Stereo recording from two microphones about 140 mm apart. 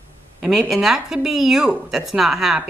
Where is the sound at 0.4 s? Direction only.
Centre (ahead or behind).